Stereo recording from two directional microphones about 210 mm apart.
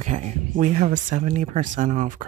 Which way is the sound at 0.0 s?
35° right (ahead or behind).